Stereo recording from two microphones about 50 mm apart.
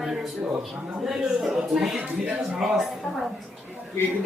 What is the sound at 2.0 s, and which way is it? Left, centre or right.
Speech, right.